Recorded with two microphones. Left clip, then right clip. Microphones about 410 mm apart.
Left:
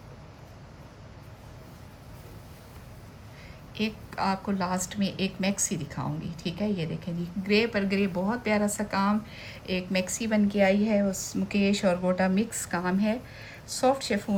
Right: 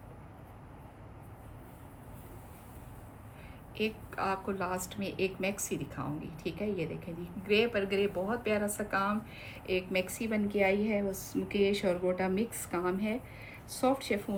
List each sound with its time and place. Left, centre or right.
3.8 s a woman's voice: left